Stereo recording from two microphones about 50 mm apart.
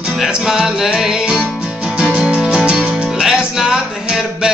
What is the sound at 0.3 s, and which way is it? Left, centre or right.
Music, centre.